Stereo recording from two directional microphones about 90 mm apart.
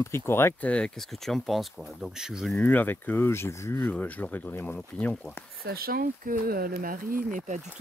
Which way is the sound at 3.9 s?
20° left (ahead or behind).